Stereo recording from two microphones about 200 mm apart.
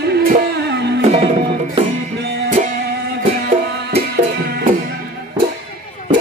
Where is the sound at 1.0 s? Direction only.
30° right (ahead or behind).